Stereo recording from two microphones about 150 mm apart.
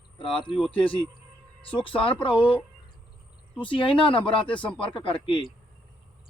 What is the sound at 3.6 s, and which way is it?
Speech, 35° left (ahead or behind).